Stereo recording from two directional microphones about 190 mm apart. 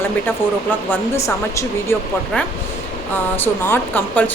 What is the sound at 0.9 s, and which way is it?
Speech, 15° left (ahead or behind).